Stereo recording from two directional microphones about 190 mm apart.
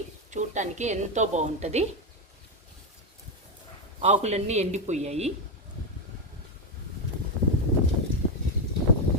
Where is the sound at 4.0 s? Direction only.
35° right (ahead or behind).